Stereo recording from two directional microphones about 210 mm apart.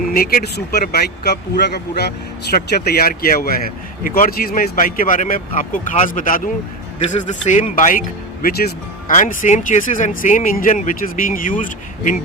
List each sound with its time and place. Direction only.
0.1 s speech: 45° left (ahead or behind)